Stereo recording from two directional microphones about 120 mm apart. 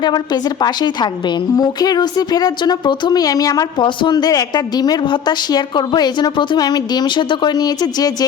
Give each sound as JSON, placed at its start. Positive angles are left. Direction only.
{"t": 0.0, "sound": "speech", "side_deg": 35}